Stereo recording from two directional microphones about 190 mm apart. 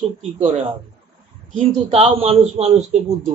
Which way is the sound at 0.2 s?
35° right (ahead or behind).